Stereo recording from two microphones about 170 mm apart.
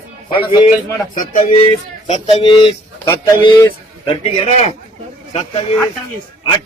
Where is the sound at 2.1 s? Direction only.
30° left (ahead or behind).